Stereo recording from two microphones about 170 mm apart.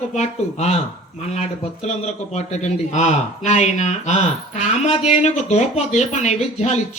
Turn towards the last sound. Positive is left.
turn(degrees=40)  # may be behind; listen again after turning